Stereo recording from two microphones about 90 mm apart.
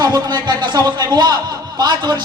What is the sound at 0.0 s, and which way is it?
Speech, 50° right (ahead or behind).